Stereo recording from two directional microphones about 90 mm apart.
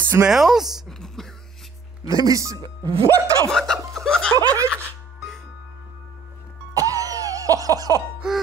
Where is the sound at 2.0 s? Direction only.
40° right (ahead or behind).